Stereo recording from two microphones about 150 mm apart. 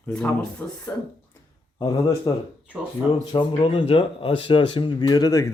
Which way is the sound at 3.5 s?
40° left (ahead or behind).